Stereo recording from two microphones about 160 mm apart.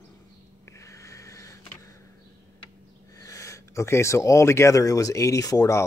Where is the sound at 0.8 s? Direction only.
20° left (ahead or behind).